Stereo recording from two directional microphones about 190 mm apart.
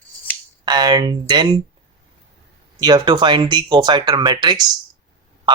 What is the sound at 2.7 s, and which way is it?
Speech, 20° right (ahead or behind).